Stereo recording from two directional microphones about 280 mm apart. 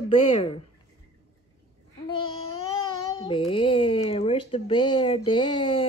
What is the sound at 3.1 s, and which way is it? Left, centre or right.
A child's voice, centre.